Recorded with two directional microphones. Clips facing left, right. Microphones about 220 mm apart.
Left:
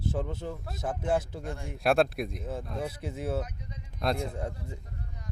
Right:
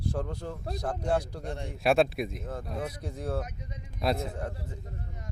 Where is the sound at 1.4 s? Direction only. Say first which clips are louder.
Right 1 dB; 25° right (ahead or behind).